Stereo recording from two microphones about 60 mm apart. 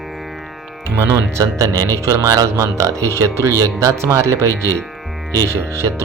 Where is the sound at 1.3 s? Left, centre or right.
Right.